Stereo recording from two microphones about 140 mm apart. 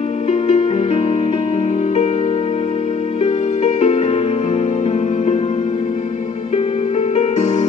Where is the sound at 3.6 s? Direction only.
50° left (ahead or behind).